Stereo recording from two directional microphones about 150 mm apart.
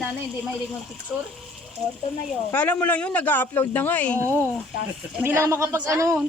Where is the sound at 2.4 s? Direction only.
10° left (ahead or behind).